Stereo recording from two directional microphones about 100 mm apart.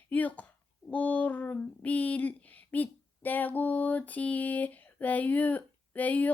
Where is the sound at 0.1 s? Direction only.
15° left (ahead or behind).